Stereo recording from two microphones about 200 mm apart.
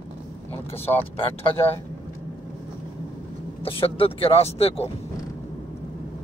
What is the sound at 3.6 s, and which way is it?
Speech, 30° left (ahead or behind).